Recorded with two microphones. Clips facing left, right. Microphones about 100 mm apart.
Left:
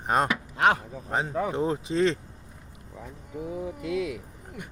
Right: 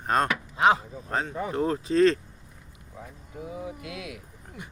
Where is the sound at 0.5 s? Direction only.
60° left (ahead or behind).